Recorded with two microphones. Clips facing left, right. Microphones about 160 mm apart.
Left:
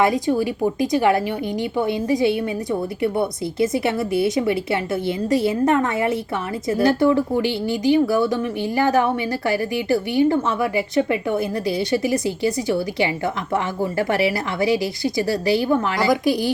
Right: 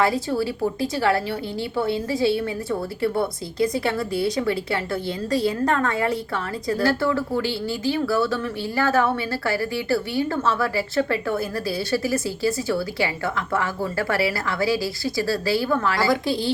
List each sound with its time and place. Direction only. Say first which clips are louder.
0.0 s a woman's voice: left 3 dB; 15° left (ahead or behind)